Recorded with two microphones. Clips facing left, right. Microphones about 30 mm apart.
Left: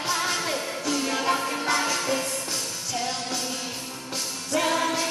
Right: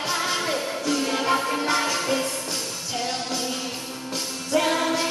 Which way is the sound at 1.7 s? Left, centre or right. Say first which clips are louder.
Even; right.